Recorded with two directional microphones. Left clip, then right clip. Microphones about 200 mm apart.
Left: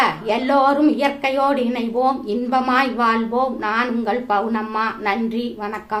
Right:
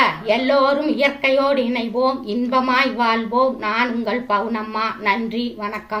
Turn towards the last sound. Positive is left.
turn(degrees=15)  # may be behind; listen again after turning